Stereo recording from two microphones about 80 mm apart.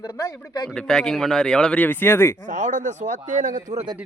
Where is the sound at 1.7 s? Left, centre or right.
Left.